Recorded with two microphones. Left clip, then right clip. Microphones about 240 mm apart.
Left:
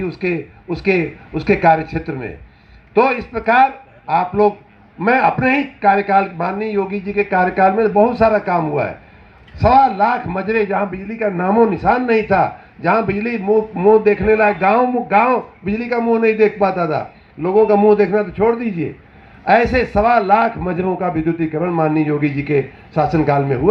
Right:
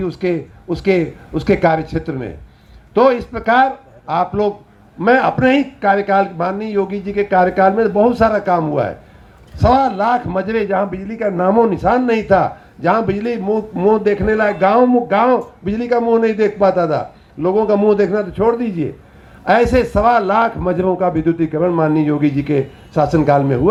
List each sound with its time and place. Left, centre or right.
0.2 s a man's voice: right